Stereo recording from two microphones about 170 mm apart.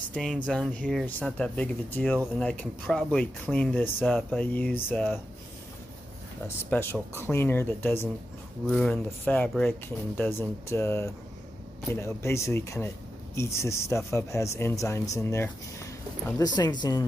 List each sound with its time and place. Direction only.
0.1 s speech: 5° left (ahead or behind)
6.4 s speech: 15° left (ahead or behind)
8.6 s speech: centre (ahead or behind); by 17.0 s 25° left (ahead or behind)